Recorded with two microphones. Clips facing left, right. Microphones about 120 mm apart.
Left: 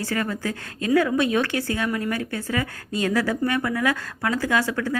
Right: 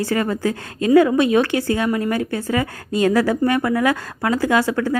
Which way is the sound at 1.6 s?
30° right (ahead or behind).